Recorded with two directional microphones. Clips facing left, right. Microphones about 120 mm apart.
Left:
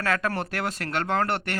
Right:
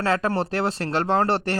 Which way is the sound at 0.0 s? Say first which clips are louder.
Right 4 dB; 30° right (ahead or behind).